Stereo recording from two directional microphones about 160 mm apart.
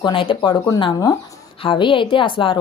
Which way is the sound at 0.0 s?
30° left (ahead or behind).